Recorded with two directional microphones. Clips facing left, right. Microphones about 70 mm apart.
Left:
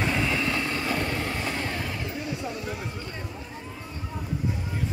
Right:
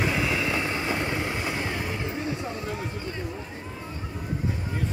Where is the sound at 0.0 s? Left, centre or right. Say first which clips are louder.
Even; centre; by 2.3 s right.